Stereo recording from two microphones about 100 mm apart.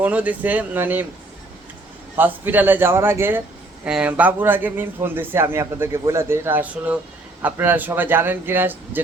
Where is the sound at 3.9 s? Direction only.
10° right (ahead or behind).